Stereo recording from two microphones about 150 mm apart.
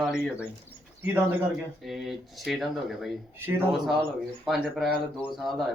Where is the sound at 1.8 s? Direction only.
Centre (ahead or behind).